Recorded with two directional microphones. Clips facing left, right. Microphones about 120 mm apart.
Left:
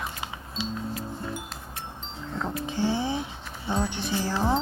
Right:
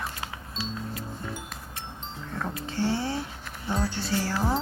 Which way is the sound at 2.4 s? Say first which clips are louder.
Left 1 dB; 15° left (ahead or behind).